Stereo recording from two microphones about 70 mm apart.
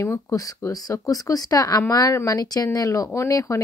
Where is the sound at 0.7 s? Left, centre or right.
Left.